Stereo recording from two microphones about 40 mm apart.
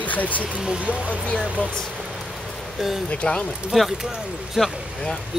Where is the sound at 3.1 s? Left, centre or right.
Left.